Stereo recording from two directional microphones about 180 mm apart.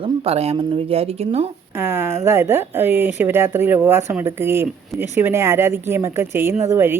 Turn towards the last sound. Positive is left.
turn(degrees=-15)  # may be behind; listen again after turning